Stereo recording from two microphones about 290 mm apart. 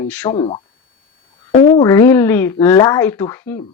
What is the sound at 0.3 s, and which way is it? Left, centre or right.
Speech, centre.